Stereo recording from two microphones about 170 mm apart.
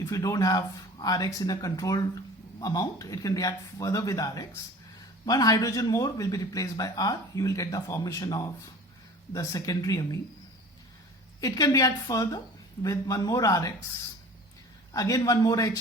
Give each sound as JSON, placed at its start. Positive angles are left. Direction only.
{"t": 0.0, "sound": "speech", "side_deg": 20}
{"t": 11.3, "sound": "speech", "side_deg": 20}
{"t": 14.9, "sound": "speech", "side_deg": 20}